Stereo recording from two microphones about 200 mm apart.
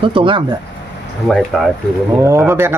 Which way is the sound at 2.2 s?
15° right (ahead or behind).